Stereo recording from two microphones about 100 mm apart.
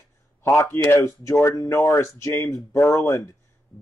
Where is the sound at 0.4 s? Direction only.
25° left (ahead or behind).